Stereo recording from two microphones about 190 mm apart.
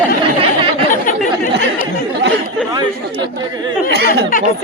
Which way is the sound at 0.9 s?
45° left (ahead or behind).